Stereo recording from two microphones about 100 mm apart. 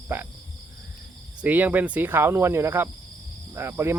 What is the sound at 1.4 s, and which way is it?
Speech, 15° right (ahead or behind).